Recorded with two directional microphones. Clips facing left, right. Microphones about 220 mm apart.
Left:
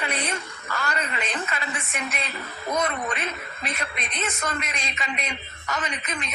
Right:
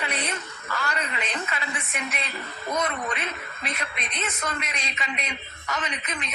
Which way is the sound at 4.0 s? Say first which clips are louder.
Left 2 dB; 45° left (ahead or behind).